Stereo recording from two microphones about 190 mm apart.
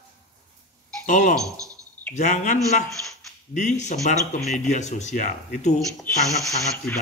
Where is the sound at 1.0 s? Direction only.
40° left (ahead or behind).